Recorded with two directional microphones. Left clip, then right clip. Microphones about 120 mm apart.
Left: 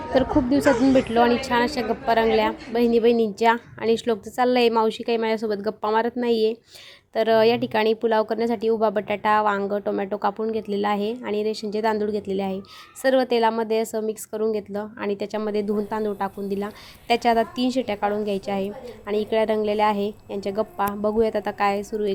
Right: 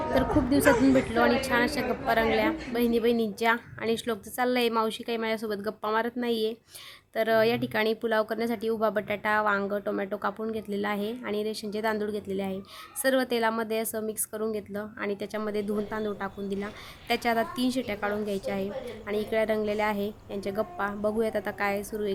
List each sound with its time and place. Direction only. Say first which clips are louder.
0.9 s a woman's voice: left 5 dB; 30° left (ahead or behind)